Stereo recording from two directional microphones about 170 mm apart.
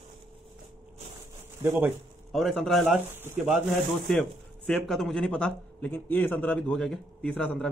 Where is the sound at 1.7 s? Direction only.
Centre (ahead or behind).